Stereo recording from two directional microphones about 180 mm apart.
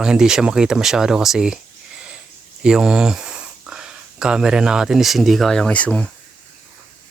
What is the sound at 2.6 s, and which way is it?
Speech, 5° right (ahead or behind).